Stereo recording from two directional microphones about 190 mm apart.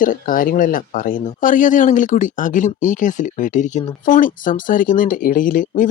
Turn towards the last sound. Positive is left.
turn(degrees=45)  # may be behind; listen again after turning